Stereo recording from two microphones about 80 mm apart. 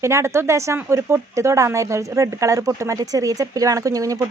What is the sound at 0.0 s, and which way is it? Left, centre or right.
Speech, right.